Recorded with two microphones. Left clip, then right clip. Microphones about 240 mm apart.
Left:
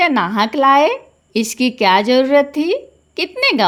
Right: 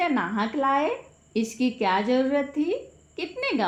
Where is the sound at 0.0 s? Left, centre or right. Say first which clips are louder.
Left 11 dB; left.